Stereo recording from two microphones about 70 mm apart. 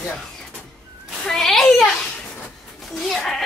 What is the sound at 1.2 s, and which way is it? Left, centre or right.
A child's voice, centre.